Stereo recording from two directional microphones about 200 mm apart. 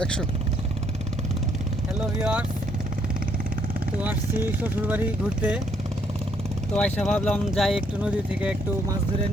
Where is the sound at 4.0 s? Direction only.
10° right (ahead or behind).